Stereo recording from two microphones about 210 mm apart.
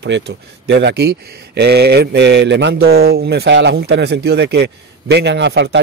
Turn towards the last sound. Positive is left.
turn(degrees=-55)  # may be behind; listen again after turning